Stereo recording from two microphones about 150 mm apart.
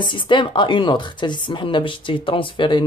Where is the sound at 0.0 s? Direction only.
30° left (ahead or behind).